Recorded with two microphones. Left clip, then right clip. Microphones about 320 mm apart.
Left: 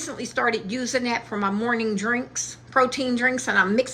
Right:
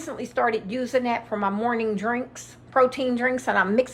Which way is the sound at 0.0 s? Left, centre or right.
Centre.